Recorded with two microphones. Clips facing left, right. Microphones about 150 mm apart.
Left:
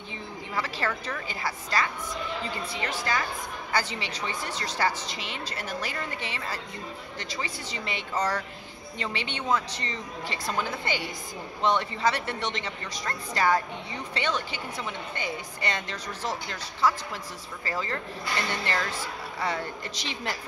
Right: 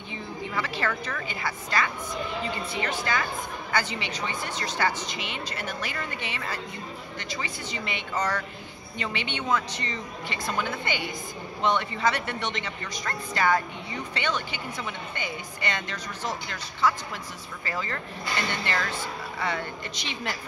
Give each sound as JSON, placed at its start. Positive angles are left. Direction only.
{"t": 0.6, "sound": "a woman's voice", "side_deg": 35}